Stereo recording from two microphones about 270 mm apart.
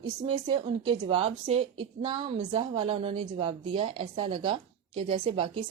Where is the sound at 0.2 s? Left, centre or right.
Centre.